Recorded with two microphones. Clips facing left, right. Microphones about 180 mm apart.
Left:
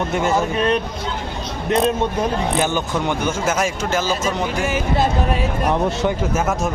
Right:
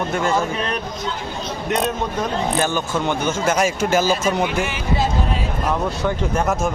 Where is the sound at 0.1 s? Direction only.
20° left (ahead or behind).